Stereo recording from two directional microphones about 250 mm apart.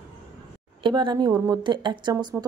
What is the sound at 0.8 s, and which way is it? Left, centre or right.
Speech, centre.